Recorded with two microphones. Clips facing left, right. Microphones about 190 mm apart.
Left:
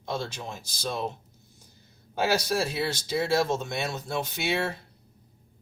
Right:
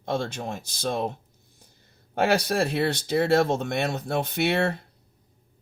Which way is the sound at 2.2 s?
60° right (ahead or behind).